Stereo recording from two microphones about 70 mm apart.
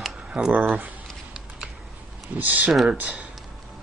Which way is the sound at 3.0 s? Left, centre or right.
Right.